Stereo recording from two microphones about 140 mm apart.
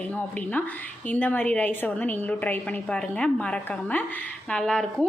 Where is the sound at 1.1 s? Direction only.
10° left (ahead or behind).